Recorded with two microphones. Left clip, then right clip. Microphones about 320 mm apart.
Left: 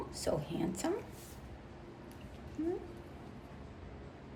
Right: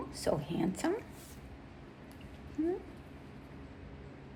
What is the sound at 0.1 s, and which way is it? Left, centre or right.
Speech, right.